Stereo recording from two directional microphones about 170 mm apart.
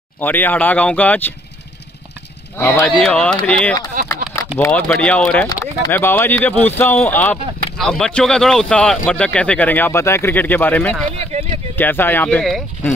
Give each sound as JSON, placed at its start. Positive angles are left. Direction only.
{"t": 0.2, "sound": "speech", "side_deg": 10}
{"t": 2.5, "sound": "speech", "side_deg": 15}
{"t": 3.0, "sound": "speech", "side_deg": 5}
{"t": 4.0, "sound": "speech", "side_deg": -55}
{"t": 4.6, "sound": "speech", "side_deg": 10}
{"t": 5.5, "sound": "speech", "side_deg": 20}
{"t": 7.7, "sound": "speech", "side_deg": 0}